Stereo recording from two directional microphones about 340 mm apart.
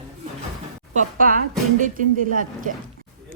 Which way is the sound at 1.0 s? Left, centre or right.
Right.